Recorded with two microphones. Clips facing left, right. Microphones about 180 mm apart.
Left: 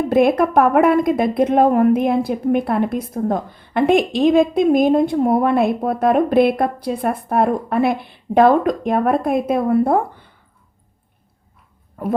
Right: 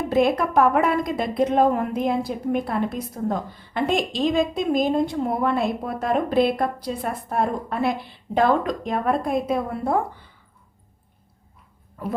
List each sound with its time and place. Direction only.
0.1 s a woman's voice: 55° left (ahead or behind)